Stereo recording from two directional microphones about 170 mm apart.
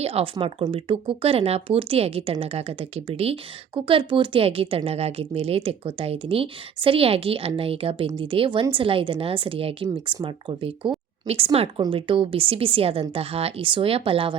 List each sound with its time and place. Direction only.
0.0 s speech: 35° right (ahead or behind)